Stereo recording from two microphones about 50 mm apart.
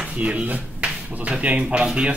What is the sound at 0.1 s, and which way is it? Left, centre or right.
Speech, right.